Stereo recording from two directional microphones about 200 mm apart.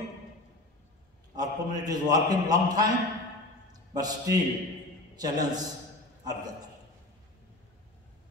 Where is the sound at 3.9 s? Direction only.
20° right (ahead or behind).